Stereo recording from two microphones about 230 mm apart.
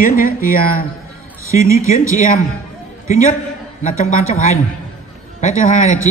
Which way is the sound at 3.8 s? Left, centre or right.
Left.